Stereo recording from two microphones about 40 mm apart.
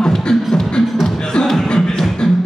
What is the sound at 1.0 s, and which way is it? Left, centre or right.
Beatboxing, centre.